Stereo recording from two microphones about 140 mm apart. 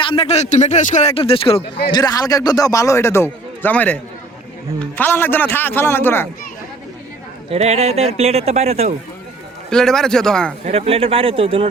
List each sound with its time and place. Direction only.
0.0 s speech: 40° left (ahead or behind)
1.9 s a man's voice: 30° left (ahead or behind)
7.5 s a man's voice: 50° right (ahead or behind)
9.6 s a man's voice: 5° left (ahead or behind)
10.7 s a man's voice: 45° right (ahead or behind)